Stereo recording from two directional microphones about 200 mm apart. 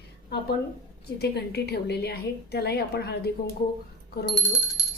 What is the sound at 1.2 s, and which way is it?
A woman's voice, 55° left (ahead or behind).